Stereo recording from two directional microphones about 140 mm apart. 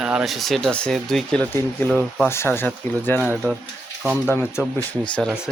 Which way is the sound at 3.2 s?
10° right (ahead or behind).